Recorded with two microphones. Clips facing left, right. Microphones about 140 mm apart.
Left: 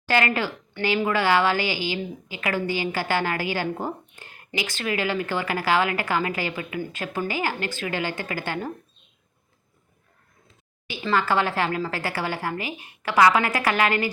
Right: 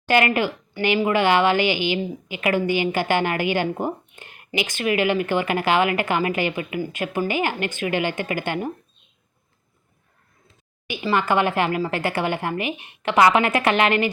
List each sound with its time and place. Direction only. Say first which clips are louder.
0.1 s a woman's voice: right 4 dB; 15° right (ahead or behind)
10.8 s a woman's voice: right 2 dB; 15° right (ahead or behind)